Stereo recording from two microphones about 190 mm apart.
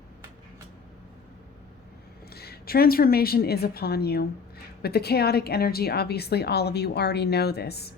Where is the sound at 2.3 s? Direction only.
55° left (ahead or behind).